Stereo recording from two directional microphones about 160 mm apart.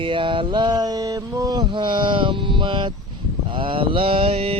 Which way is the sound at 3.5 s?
30° right (ahead or behind).